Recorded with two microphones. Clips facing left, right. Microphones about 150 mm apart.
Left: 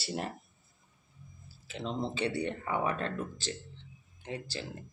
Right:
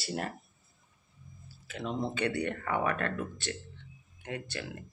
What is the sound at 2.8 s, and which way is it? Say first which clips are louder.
Speech: right 1 dB; 60° right (ahead or behind).